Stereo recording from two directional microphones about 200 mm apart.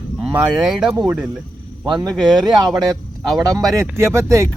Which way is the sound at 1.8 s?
15° right (ahead or behind).